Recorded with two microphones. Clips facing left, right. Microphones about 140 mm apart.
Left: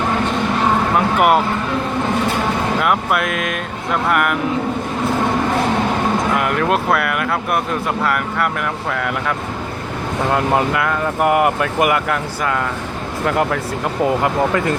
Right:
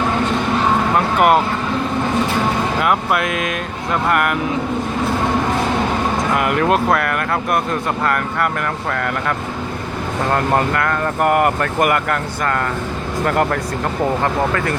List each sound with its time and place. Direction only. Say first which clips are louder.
0.9 s a sound: right 1 dB; 5° left (ahead or behind)
2.8 s speech: right 1 dB; centre (ahead or behind)
6.3 s speech: right 1 dB; centre (ahead or behind)
10.3 s speech: even; 5° left (ahead or behind)
13.2 s speech: even; centre (ahead or behind)
14.5 s speech: left 2 dB; 20° left (ahead or behind)